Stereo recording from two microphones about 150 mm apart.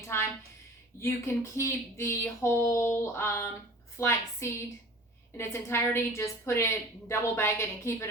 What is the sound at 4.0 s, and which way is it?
A woman's voice, 20° left (ahead or behind).